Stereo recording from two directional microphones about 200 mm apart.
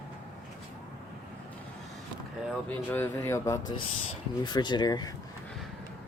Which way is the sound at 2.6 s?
10° left (ahead or behind).